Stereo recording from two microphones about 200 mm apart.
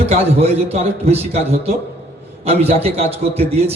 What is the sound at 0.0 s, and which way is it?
A man's voice, 30° right (ahead or behind).